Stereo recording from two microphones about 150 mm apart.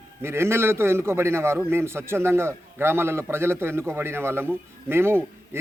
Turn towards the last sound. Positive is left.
turn(degrees=-15)  # may be behind; listen again after turning